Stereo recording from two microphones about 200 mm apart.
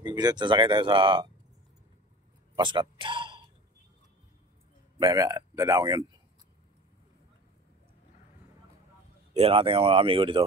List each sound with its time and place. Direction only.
0.0 s speech: 20° right (ahead or behind)
2.5 s a man's voice: 25° right (ahead or behind)
4.9 s speech: 20° right (ahead or behind)
9.3 s speech: 30° right (ahead or behind)